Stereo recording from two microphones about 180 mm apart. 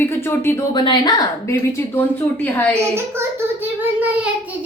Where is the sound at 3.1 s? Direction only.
10° right (ahead or behind).